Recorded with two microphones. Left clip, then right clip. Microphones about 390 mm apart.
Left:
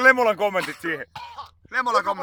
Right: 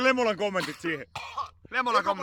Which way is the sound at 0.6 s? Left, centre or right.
Centre.